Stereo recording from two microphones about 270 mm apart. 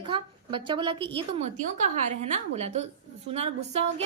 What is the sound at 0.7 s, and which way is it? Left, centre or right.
A woman's voice, centre.